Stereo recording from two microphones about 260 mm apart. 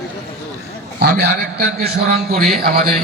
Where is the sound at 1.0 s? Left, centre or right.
Right.